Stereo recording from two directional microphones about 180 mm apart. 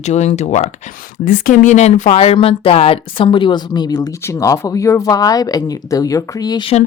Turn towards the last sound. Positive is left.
turn(degrees=20)  # may be behind; listen again after turning